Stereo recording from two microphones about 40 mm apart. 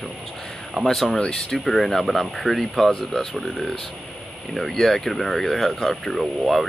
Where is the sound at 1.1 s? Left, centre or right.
Centre.